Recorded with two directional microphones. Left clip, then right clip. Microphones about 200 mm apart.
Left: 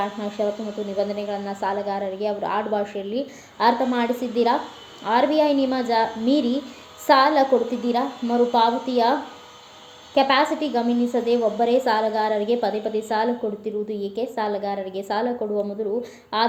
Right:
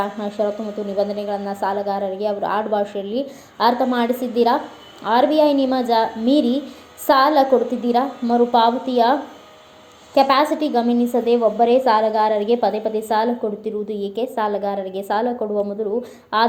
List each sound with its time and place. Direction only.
0.2 s a woman's voice: 20° right (ahead or behind)
10.2 s a woman's voice: 20° right (ahead or behind)